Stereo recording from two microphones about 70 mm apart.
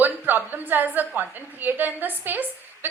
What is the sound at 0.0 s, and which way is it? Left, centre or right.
A woman's voice, right.